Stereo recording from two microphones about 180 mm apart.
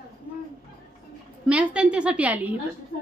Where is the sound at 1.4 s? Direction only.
5° right (ahead or behind).